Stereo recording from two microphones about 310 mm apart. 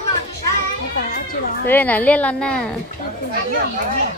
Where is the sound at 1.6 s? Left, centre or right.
Centre.